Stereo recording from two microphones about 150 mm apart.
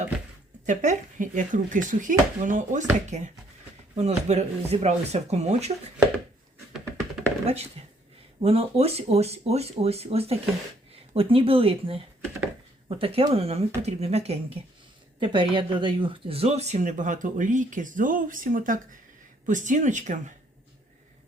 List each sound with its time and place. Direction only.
0.6 s speech: 55° right (ahead or behind)
7.4 s speech: 45° right (ahead or behind)
15.2 s speech: 35° right (ahead or behind); by 20.3 s 55° right (ahead or behind)